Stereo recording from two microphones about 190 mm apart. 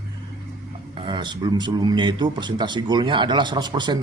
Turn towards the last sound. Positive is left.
turn(degrees=-25)  # may be behind; listen again after turning